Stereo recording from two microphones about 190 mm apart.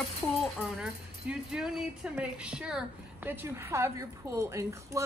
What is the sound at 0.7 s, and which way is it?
Speech, 5° right (ahead or behind).